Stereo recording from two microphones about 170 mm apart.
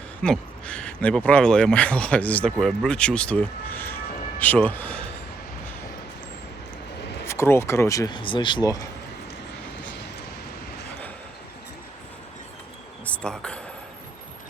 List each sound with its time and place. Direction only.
0.2 s speech: 5° left (ahead or behind)
7.3 s speech: 15° left (ahead or behind)
13.1 s insect: 5° left (ahead or behind)